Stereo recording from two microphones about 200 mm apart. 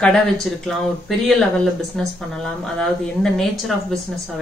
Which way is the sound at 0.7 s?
Centre (ahead or behind).